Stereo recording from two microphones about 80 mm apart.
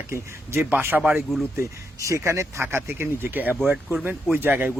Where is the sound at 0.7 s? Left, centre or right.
Right.